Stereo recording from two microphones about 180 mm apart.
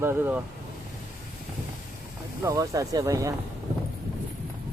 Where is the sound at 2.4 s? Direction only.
20° right (ahead or behind).